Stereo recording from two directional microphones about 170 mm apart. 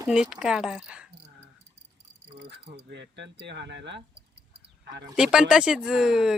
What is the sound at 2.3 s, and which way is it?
Speech, 80° right.